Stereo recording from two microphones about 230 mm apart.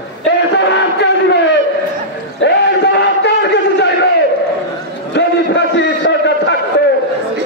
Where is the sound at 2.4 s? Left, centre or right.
Left.